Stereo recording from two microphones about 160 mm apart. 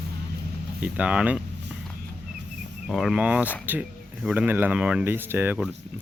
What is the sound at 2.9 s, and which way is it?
Speech, centre (ahead or behind).